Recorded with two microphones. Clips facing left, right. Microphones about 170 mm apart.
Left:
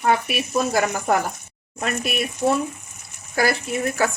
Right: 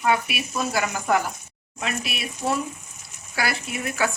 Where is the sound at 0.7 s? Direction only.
45° left (ahead or behind).